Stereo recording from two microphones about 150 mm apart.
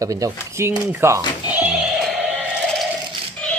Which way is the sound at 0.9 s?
15° right (ahead or behind).